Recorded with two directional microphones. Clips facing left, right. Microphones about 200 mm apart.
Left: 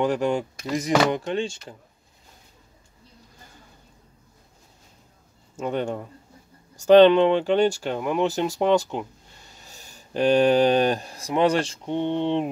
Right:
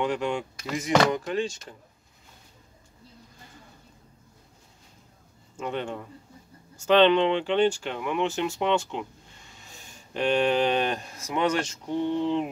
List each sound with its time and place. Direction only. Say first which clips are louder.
0.0 s speech: left 5 dB; 40° left (ahead or behind)
5.6 s speech: left 5 dB; 40° left (ahead or behind)